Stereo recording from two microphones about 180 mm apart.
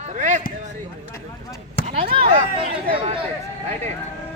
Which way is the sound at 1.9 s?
35° right (ahead or behind).